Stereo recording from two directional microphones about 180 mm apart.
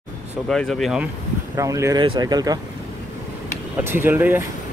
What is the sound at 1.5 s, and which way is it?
Speech, 15° right (ahead or behind).